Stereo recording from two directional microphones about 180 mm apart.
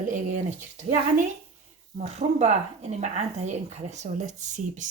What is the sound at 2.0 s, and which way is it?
Speech, 40° right (ahead or behind).